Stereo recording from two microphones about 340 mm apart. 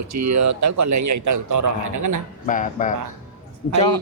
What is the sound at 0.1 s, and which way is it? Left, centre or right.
A man's voice, right.